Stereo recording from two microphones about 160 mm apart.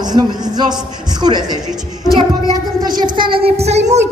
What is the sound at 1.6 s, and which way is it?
Speech, 5° right (ahead or behind).